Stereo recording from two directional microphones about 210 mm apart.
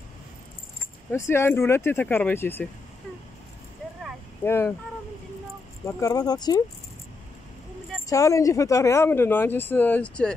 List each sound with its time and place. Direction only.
1.1 s speech: 10° left (ahead or behind)
4.5 s speech: 10° left (ahead or behind)
5.9 s speech: 15° left (ahead or behind)
8.1 s speech: 15° left (ahead or behind)